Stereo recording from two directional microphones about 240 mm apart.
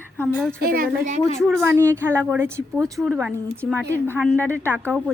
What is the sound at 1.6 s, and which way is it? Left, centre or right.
Speech, centre.